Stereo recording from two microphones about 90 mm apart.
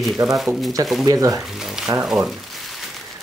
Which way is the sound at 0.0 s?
Centre (ahead or behind).